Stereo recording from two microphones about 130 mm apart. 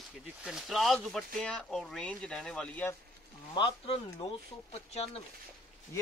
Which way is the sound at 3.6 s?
45° left (ahead or behind).